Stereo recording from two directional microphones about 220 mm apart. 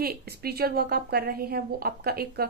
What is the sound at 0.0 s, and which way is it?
A woman's voice, 45° right (ahead or behind).